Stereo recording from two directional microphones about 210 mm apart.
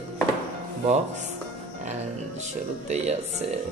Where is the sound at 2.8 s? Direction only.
30° right (ahead or behind).